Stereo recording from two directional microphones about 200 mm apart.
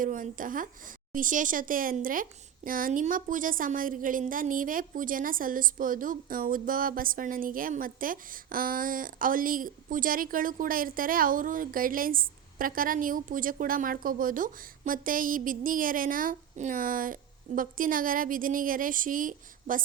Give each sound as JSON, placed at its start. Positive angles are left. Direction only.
{"t": 0.0, "sound": "a woman's voice", "side_deg": -40}